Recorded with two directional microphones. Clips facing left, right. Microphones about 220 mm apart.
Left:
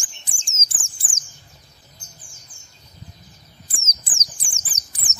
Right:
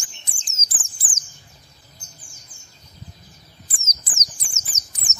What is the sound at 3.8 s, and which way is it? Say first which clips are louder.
Bird: right 1 dB; 30° left (ahead or behind).